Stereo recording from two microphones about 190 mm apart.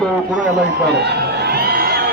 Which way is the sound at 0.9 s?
60° right (ahead or behind).